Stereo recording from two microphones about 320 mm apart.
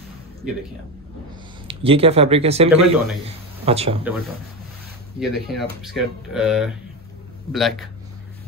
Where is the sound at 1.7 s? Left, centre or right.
Centre.